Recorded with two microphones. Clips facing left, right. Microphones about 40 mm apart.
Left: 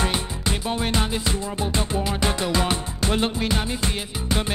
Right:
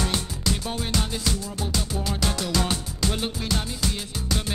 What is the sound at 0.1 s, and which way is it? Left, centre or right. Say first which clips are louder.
Music: left 1 dB; left.